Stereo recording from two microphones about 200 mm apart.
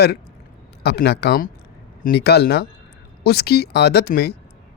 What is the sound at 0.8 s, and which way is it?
A man's voice, 55° left (ahead or behind).